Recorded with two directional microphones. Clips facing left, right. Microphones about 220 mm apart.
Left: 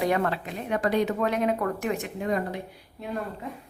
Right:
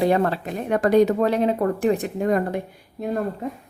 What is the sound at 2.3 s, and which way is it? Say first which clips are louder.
Speech: right 6 dB; 50° right (ahead or behind).